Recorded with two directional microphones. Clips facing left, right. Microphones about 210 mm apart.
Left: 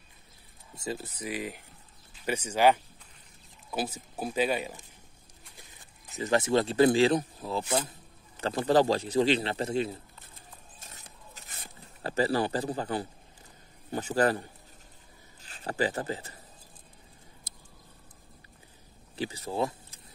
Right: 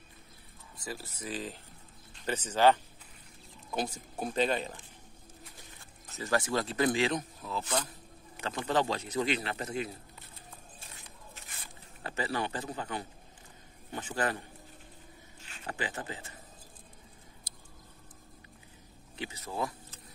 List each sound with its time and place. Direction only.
0.7 s speech: 25° left (ahead or behind)
5.8 s speech: 15° left (ahead or behind)
10.8 s a sound: 40° left (ahead or behind)
13.9 s speech: 40° left (ahead or behind)
15.4 s speech: 35° left (ahead or behind)
19.1 s speech: 30° left (ahead or behind)